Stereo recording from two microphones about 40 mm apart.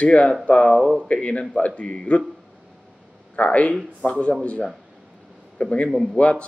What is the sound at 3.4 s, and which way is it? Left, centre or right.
Speech, left.